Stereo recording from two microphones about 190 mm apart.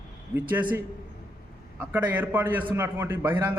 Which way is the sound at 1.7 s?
10° right (ahead or behind).